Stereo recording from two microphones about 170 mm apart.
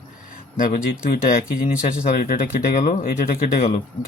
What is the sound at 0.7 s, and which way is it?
Speech, 60° left (ahead or behind).